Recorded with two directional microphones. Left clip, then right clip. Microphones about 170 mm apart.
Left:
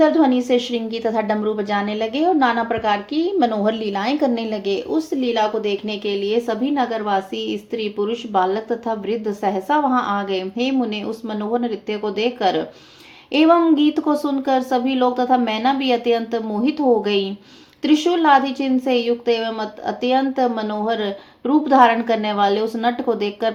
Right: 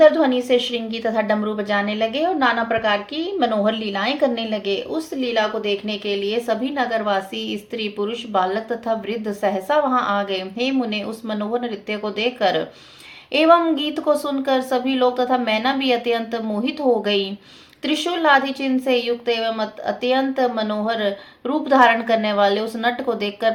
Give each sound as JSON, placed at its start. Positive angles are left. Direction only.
{"t": 0.0, "sound": "a woman's voice", "side_deg": 40}